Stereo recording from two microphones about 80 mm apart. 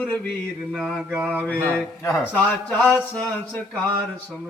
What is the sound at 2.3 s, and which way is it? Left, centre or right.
Speech, left.